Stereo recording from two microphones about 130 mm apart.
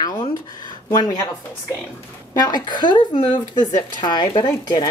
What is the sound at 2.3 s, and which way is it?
Speech, 30° left (ahead or behind).